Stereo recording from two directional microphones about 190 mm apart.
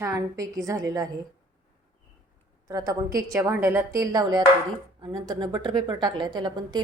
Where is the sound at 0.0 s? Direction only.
15° right (ahead or behind).